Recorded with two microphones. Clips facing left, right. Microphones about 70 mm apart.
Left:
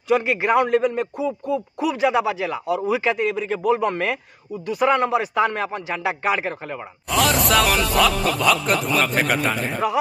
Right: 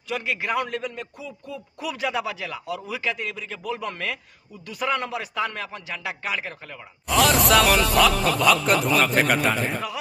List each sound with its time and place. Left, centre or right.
0.1 s speech: left
7.1 s a man's voice: centre